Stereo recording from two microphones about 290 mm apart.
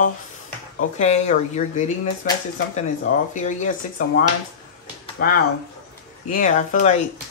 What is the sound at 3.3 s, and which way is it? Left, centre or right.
Speech, left.